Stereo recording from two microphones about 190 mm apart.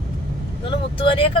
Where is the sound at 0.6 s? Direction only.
25° left (ahead or behind).